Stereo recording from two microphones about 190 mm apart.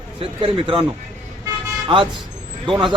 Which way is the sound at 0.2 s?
30° right (ahead or behind).